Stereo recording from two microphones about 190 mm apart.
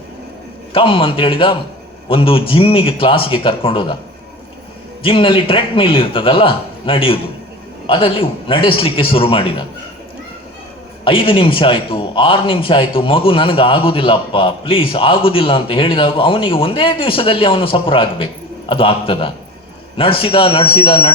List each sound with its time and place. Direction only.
0.7 s a man's voice: 30° left (ahead or behind)
5.0 s a man's voice: 25° left (ahead or behind)
11.0 s a man's voice: 30° left (ahead or behind)